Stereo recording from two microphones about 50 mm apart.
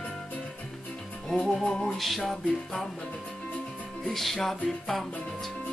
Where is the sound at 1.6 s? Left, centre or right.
Centre.